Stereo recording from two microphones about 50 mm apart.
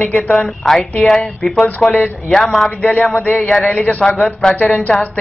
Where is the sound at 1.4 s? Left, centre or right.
Centre.